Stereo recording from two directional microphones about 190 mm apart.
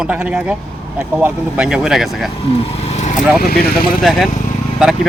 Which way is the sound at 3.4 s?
55° left (ahead or behind).